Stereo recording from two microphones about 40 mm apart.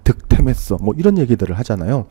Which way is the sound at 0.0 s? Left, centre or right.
Right.